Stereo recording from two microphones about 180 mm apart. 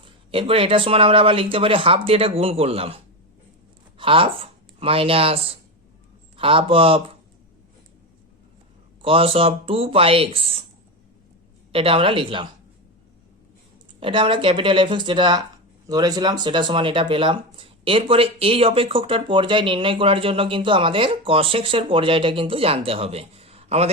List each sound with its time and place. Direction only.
0.0 s speech: 30° right (ahead or behind)
9.0 s speech: 30° right (ahead or behind)
11.7 s speech: 30° right (ahead or behind)
14.0 s speech: 30° right (ahead or behind)